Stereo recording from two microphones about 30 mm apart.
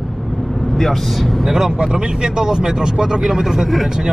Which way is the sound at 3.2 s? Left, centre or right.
Centre.